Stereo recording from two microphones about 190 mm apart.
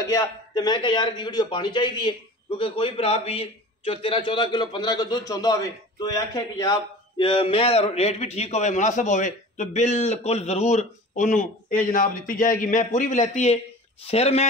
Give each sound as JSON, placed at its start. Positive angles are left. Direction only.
{"t": 0.0, "sound": "a man's voice", "side_deg": 15}